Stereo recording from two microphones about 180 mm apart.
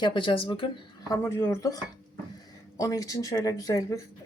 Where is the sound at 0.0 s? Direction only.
25° left (ahead or behind).